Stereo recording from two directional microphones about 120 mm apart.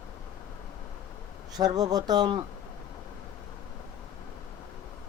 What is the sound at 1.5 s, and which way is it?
Speech, 35° right (ahead or behind).